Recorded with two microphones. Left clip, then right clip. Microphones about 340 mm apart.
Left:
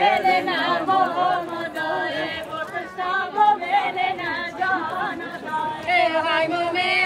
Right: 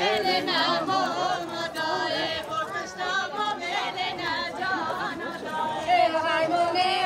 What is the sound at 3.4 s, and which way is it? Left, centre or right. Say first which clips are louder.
Music: left 10 dB; centre.